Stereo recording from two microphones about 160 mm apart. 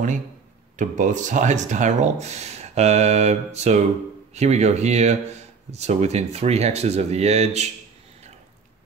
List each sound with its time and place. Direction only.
0.7 s speech: 50° right (ahead or behind)